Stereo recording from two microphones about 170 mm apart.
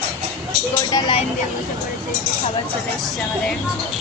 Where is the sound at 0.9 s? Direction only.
25° left (ahead or behind).